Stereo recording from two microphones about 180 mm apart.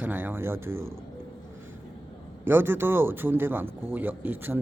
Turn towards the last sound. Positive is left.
turn(degrees=-10)  # may be behind; listen again after turning